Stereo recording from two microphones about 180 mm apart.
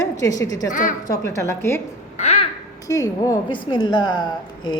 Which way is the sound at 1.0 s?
15° left (ahead or behind).